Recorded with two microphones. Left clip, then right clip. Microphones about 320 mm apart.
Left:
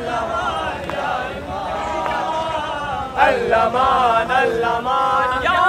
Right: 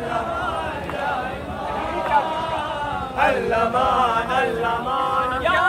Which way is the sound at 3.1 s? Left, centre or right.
Left.